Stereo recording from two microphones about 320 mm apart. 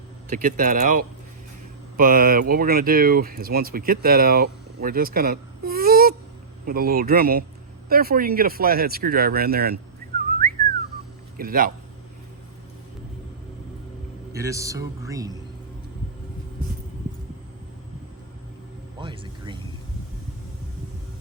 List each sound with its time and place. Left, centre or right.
0.3 s speech: right
11.3 s speech: right
14.3 s speech: centre
18.9 s music: centre